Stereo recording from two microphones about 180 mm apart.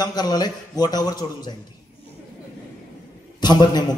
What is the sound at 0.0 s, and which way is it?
A man's voice, 20° left (ahead or behind).